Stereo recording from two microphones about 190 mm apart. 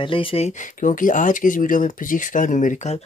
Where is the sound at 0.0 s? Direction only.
30° left (ahead or behind).